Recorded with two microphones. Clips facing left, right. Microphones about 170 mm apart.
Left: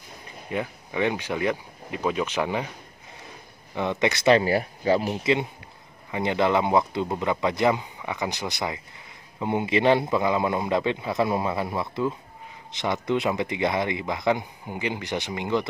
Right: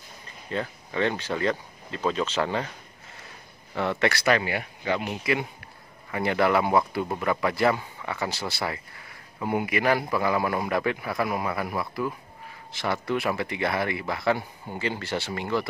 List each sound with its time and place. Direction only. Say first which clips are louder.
0.5 s speech: left 1 dB; 15° left (ahead or behind)
3.7 s speech: left 1 dB; 15° left (ahead or behind)